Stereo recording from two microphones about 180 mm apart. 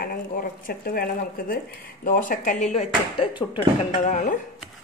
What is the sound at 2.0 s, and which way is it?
Speech, 50° left (ahead or behind).